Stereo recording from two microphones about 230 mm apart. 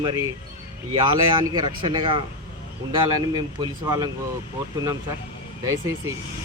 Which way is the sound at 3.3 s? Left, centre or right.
Centre.